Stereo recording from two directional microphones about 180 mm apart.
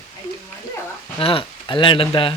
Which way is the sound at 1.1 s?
30° left (ahead or behind).